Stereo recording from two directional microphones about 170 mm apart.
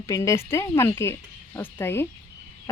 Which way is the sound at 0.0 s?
20° left (ahead or behind).